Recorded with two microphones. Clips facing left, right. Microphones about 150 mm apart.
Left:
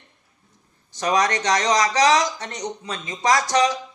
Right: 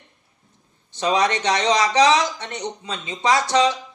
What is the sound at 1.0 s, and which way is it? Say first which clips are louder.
Speech: right 1 dB; 25° right (ahead or behind).